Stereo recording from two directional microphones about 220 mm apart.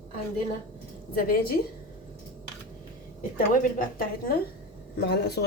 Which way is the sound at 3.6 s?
40° left (ahead or behind).